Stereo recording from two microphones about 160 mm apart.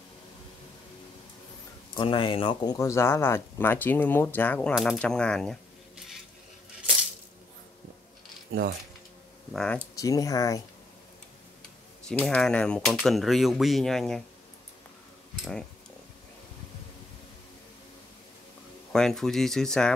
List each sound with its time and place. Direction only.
2.0 s speech: 30° left (ahead or behind); by 6.1 s centre (ahead or behind)
9.5 s speech: 5° left (ahead or behind)
9.9 s speech: 20° left (ahead or behind)
12.1 s speech: 5° left (ahead or behind)
18.9 s speech: 5° left (ahead or behind)